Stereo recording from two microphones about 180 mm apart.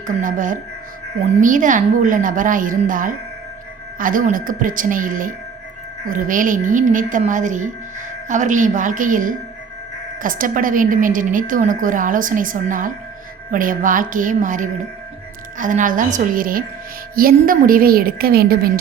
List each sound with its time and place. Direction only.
0.2 s a woman's voice: 45° right (ahead or behind)